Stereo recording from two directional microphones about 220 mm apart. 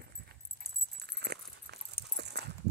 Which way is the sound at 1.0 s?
50° right (ahead or behind).